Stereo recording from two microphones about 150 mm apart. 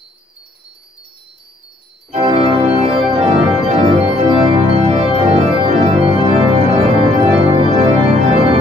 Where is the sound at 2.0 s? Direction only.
40° right (ahead or behind).